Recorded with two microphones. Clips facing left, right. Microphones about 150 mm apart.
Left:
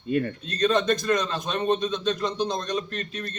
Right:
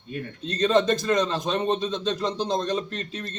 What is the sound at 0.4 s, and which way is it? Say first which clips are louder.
A man's voice: right 4 dB; 25° right (ahead or behind).